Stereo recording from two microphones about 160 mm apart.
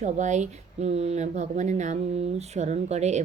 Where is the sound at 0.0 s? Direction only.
50° right (ahead or behind).